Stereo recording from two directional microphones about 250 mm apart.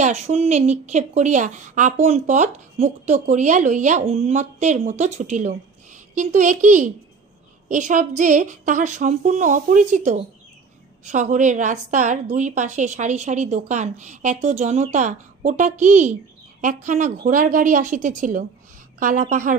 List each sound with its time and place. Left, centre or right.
0.0 s a woman's voice: right